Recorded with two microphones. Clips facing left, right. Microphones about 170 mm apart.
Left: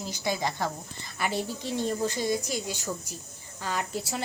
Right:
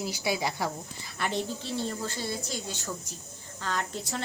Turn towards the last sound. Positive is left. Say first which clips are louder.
# left 1 dB
turn(degrees=10)  # may be behind; listen again after turning